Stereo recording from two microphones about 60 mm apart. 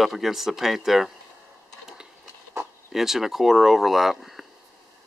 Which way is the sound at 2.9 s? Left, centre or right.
Centre.